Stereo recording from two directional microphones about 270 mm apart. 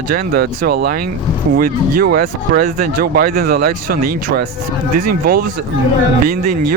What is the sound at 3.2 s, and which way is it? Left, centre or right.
Speech, right.